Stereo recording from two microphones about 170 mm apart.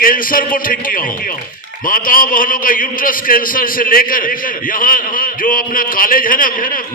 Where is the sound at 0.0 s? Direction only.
55° left (ahead or behind).